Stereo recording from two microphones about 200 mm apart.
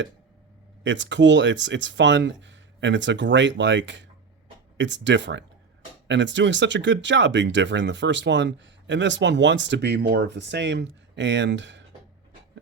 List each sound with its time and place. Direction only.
0.9 s speech: 65° right (ahead or behind)